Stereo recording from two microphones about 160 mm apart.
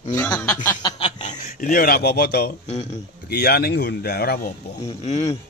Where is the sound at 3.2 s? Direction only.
75° left (ahead or behind).